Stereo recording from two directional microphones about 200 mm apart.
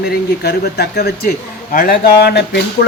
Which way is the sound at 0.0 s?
55° left (ahead or behind).